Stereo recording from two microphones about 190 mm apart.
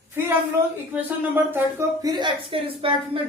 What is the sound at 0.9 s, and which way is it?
Speech, 10° right (ahead or behind).